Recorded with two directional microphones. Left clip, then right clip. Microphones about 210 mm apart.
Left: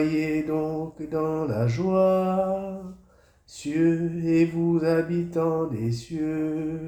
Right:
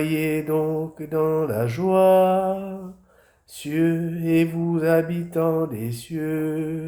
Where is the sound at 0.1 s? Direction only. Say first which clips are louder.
Right 3 dB; 30° right (ahead or behind).